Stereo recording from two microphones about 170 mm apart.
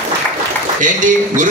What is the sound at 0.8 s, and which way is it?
Speech, 50° right (ahead or behind).